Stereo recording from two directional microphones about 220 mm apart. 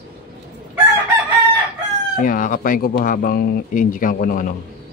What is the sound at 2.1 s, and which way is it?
Speech, 40° left (ahead or behind).